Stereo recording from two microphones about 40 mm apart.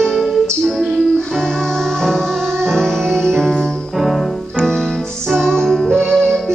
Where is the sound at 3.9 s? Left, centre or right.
Centre.